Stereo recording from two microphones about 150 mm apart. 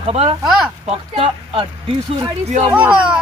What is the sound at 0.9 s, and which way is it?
Speech, 40° right (ahead or behind).